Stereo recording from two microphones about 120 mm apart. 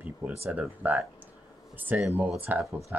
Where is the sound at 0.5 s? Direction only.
10° right (ahead or behind).